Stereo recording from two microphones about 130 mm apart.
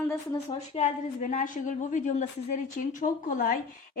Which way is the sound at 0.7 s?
65° left (ahead or behind).